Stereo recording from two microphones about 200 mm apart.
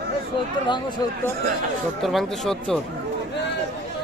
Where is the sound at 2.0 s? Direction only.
Centre (ahead or behind).